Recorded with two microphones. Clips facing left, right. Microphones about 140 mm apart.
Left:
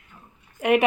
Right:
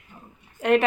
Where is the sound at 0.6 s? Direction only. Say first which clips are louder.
Even; 10° left (ahead or behind).